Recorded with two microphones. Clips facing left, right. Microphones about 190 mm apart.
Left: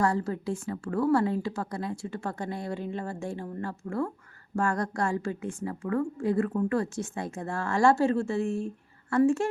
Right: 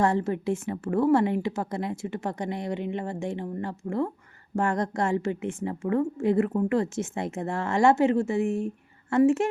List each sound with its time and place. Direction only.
0.0 s a woman's voice: 25° right (ahead or behind)